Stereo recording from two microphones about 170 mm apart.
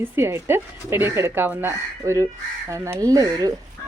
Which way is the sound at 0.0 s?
15° right (ahead or behind).